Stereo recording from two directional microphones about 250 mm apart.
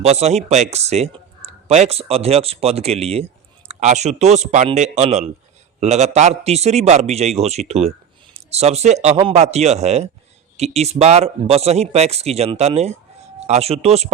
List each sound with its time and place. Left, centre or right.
0.0 s a man's voice: right